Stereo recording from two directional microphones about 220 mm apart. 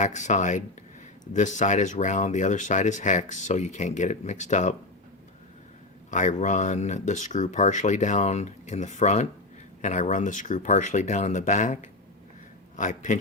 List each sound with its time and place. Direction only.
0.0 s speech: 35° left (ahead or behind)
6.1 s a man's voice: 35° left (ahead or behind)